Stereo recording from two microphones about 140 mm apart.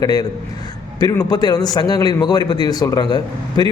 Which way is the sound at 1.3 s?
30° left (ahead or behind).